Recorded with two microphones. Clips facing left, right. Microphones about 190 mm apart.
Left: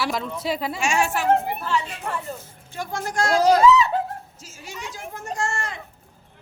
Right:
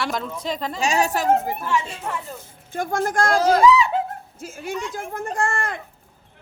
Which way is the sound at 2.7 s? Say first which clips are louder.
Right 6 dB; 50° right (ahead or behind).